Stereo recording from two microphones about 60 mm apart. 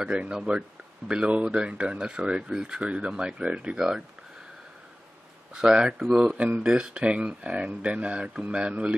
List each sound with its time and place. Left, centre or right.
0.0 s speech: centre
3.7 s speech: centre
5.5 s speech: centre